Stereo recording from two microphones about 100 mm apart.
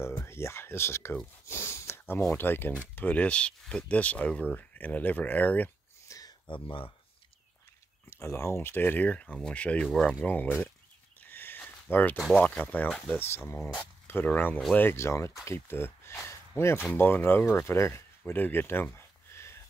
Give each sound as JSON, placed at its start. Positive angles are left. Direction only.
{"t": 0.2, "sound": "speech", "side_deg": 25}
{"t": 6.0, "sound": "a sound", "side_deg": 35}
{"t": 6.4, "sound": "speech", "side_deg": 55}
{"t": 8.1, "sound": "speech", "side_deg": 30}
{"t": 11.1, "sound": "a sound", "side_deg": 20}
{"t": 12.4, "sound": "speech", "side_deg": 15}